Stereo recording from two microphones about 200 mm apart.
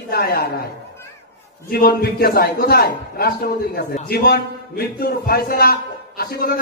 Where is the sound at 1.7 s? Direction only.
50° left (ahead or behind).